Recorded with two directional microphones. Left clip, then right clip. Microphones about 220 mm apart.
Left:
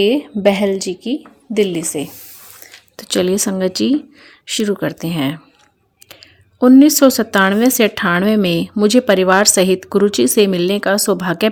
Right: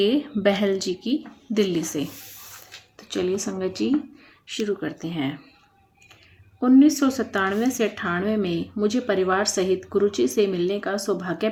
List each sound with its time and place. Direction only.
0.0 s a woman's voice: 25° left (ahead or behind)
2.9 s a woman's voice: 45° left (ahead or behind)
6.6 s a woman's voice: 45° left (ahead or behind)